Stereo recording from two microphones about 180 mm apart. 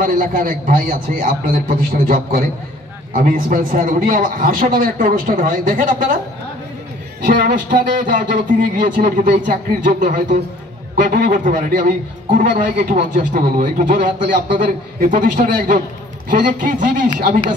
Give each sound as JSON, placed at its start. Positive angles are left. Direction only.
{"t": 0.0, "sound": "a man's voice", "side_deg": -50}
{"t": 7.4, "sound": "a man's voice", "side_deg": -45}